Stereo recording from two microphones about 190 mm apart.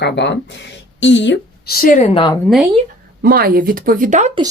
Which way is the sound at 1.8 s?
45° left (ahead or behind).